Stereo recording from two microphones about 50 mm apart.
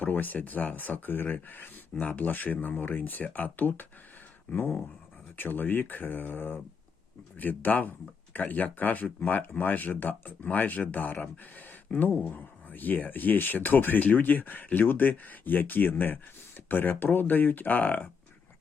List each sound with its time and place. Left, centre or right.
0.0 s speech: left